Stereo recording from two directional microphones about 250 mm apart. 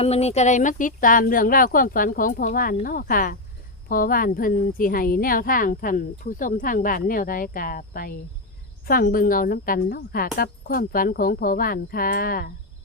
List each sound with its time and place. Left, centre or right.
0.0 s speech: left